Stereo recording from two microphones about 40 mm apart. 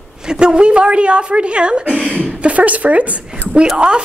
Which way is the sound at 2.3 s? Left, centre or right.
Right.